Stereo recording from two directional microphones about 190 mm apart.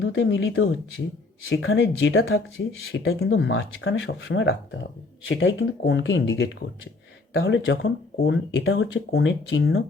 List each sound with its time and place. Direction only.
0.0 s speech: 75° left (ahead or behind)
1.5 s speech: 90° left
2.9 s speech: 75° left (ahead or behind)
5.3 s speech: 85° left
5.8 s speech: 70° left (ahead or behind)
8.2 s speech: 65° left (ahead or behind)